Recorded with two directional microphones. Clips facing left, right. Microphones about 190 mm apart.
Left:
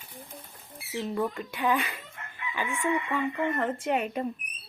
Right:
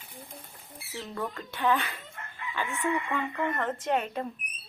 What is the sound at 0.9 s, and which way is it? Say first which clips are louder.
Speech: left 6 dB; 15° left (ahead or behind).